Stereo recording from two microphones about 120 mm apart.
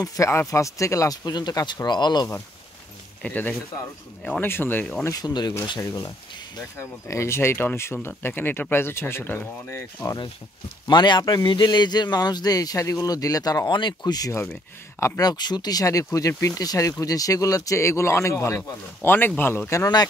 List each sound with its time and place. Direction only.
0.0 s speech: 30° left (ahead or behind)
3.2 s speech: 10° left (ahead or behind)
5.0 s speech: 30° left (ahead or behind)
10.9 s speech: 40° left (ahead or behind)